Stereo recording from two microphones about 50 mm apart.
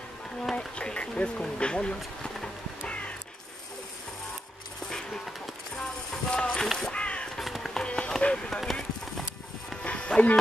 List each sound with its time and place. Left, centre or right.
0.4 s speech: centre
4.9 s music: centre
6.3 s music: left
6.6 s crow: centre
6.9 s crow: left
7.3 s music: centre
7.8 s run: centre
8.5 s clip-clop: centre
9.8 s music: left